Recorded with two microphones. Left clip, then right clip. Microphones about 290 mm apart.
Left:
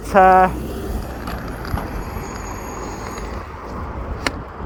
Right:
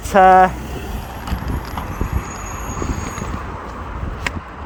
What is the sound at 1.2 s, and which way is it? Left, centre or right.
Vehicle, centre.